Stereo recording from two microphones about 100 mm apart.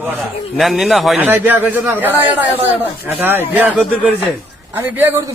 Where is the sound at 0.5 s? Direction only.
Centre (ahead or behind).